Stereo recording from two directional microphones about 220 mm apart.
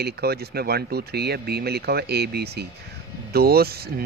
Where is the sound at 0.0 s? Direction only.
45° right (ahead or behind).